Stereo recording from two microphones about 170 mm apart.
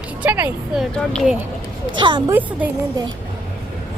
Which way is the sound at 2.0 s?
25° right (ahead or behind).